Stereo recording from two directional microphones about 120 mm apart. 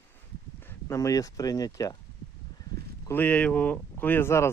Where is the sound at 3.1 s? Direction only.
15° left (ahead or behind).